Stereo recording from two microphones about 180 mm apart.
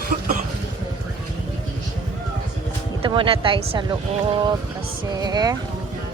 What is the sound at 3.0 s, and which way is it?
Speech, 30° right (ahead or behind).